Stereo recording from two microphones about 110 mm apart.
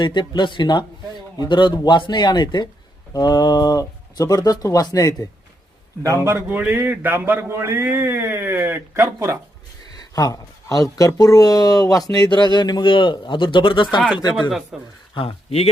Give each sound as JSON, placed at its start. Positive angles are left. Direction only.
{"t": 0.0, "sound": "speech", "side_deg": 45}
{"t": 6.0, "sound": "a man's voice", "side_deg": -25}
{"t": 10.0, "sound": "speech", "side_deg": 35}
{"t": 14.7, "sound": "speech", "side_deg": -5}
{"t": 15.1, "sound": "speech", "side_deg": 50}